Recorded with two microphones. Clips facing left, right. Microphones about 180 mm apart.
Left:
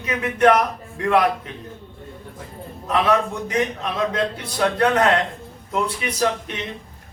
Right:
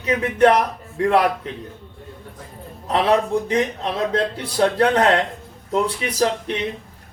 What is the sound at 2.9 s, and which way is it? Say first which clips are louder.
A man's voice: right 2 dB; 30° right (ahead or behind).